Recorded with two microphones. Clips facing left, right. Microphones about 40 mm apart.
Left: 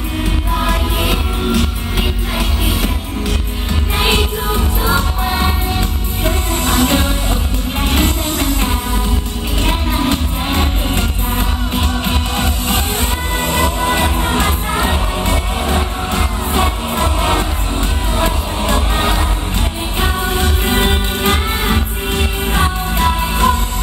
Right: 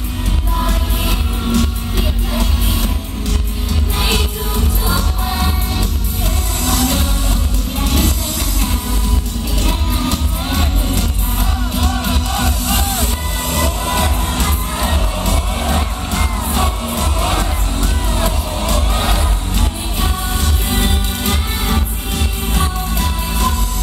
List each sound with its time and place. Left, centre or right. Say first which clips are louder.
1.5 s music: right 2 dB; centre
4.8 s music: left 6 dB; left
20.0 s music: left 5 dB; left